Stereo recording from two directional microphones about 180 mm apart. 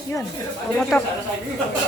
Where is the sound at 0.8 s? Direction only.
5° left (ahead or behind).